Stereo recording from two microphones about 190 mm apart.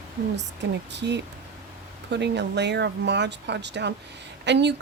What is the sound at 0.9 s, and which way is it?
A woman's voice, 65° right (ahead or behind).